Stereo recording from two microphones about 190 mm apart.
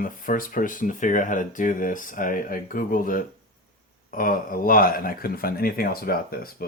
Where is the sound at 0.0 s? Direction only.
45° left (ahead or behind).